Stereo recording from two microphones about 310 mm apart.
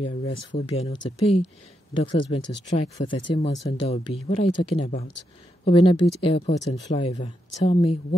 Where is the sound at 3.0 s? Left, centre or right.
Left.